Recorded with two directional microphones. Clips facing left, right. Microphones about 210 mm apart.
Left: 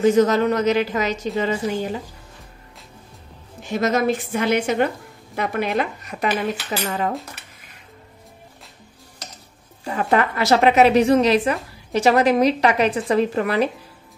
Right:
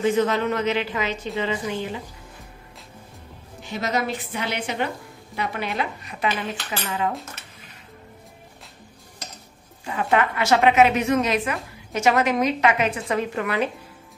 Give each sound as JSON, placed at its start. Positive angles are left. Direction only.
{"t": 0.0, "sound": "a woman's voice", "side_deg": 40}
{"t": 3.6, "sound": "a woman's voice", "side_deg": 50}
{"t": 9.8, "sound": "a woman's voice", "side_deg": 40}